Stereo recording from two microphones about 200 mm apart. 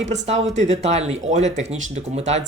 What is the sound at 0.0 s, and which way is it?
Speech, 35° right (ahead or behind).